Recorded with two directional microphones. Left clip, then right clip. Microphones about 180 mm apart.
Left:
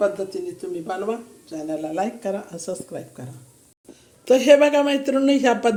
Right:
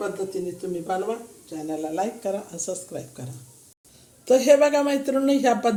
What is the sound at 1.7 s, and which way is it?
Speech, 5° left (ahead or behind).